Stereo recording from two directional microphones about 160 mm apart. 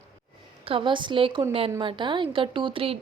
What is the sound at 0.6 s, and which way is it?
A woman's voice, 35° right (ahead or behind).